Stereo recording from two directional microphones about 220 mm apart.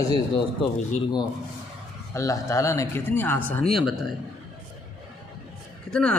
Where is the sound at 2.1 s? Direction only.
15° left (ahead or behind).